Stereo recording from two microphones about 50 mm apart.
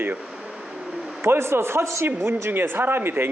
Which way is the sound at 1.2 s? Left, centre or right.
Right.